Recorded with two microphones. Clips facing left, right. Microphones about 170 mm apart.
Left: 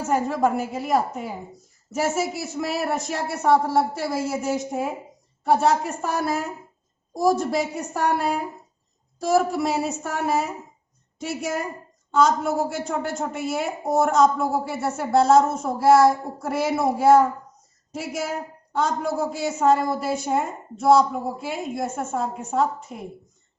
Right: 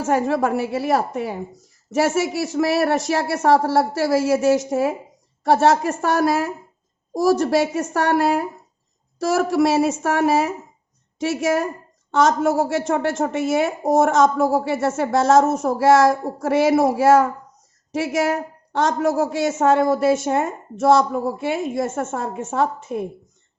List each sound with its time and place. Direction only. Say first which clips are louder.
0.0 s a woman's voice: right 3 dB; 90° right